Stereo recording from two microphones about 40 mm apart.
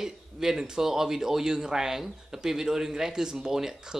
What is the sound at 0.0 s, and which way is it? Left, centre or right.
A man's voice, centre.